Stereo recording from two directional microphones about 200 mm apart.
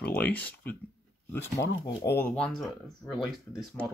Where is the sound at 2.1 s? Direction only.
5° left (ahead or behind).